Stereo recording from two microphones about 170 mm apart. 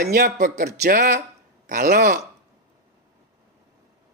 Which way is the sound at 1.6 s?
55° right (ahead or behind).